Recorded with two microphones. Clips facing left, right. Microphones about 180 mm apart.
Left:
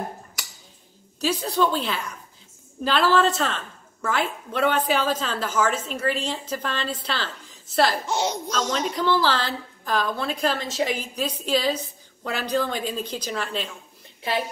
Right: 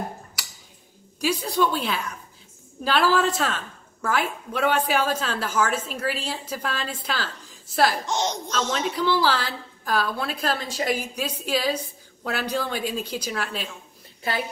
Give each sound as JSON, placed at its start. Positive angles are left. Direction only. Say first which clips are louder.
{"t": 1.2, "sound": "a woman's voice", "louder": "even", "side_deg": -10}
{"t": 8.1, "sound": "speech", "louder": "left 1 dB", "side_deg": 5}
{"t": 8.7, "sound": "a woman's voice", "louder": "left 1 dB", "side_deg": -10}